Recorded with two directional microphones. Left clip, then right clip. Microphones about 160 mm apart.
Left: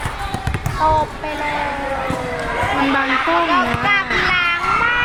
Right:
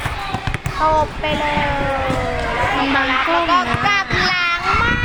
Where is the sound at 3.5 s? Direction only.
90° right.